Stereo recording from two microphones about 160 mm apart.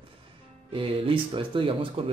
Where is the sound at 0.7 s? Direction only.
35° right (ahead or behind).